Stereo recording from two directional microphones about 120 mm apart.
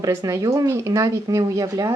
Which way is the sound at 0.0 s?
30° right (ahead or behind).